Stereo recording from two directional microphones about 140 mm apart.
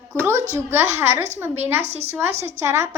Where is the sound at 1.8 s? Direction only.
50° right (ahead or behind).